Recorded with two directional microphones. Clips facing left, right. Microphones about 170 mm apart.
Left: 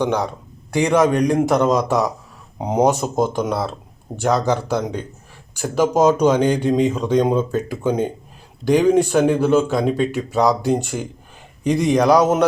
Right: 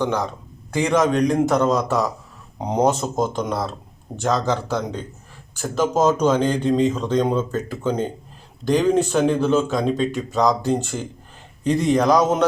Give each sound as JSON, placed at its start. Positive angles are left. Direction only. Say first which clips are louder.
{"t": 0.0, "sound": "speech", "louder": "left 2 dB", "side_deg": 15}